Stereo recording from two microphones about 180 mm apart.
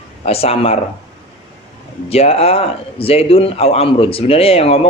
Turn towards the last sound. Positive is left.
turn(degrees=35)  # may be behind; listen again after turning